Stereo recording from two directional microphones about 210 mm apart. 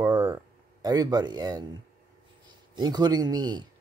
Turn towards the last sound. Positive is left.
turn(degrees=-20)  # may be behind; listen again after turning